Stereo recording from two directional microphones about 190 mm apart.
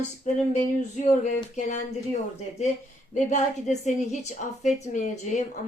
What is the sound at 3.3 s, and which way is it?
Speech, 40° left (ahead or behind).